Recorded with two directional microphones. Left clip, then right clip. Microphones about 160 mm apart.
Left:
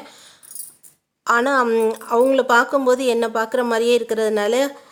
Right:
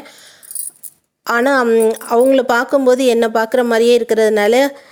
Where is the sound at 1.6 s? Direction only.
20° right (ahead or behind).